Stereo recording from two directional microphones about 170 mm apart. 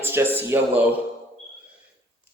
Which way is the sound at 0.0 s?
15° right (ahead or behind).